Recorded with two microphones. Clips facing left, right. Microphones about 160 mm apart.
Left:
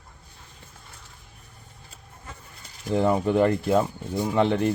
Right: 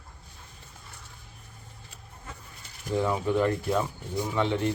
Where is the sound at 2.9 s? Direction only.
60° left (ahead or behind).